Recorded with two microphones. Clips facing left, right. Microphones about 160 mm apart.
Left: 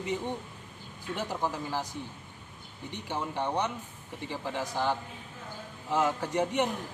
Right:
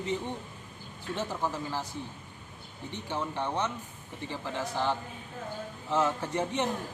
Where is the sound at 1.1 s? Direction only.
15° left (ahead or behind).